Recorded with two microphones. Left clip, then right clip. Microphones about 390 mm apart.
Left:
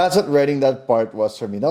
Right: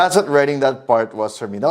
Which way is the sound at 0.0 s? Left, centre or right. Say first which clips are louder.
Right 2 dB; right.